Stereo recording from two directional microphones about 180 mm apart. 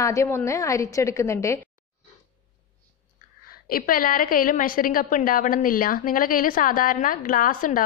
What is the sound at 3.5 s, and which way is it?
A woman's voice, 55° left (ahead or behind).